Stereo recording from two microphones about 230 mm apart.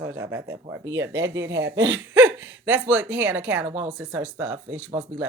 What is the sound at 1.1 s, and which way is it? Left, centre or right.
Speech, right.